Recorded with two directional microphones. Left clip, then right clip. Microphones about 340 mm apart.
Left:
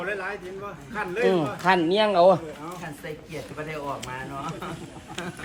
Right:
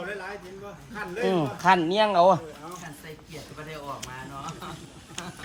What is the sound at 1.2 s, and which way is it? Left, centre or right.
Speech, centre.